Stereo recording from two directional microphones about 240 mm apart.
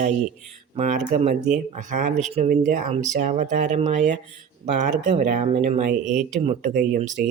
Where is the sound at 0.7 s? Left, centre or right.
Right.